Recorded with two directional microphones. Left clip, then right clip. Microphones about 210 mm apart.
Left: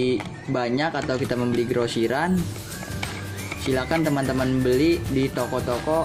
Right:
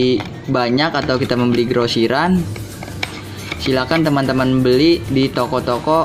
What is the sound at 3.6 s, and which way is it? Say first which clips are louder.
Speech: right 7 dB; centre (ahead or behind).